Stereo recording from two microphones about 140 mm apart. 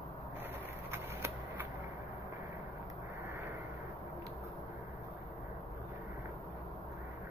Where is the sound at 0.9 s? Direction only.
15° right (ahead or behind).